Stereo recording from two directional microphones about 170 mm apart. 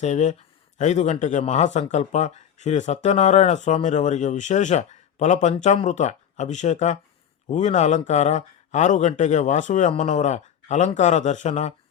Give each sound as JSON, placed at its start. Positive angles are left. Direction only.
{"t": 0.0, "sound": "speech", "side_deg": 45}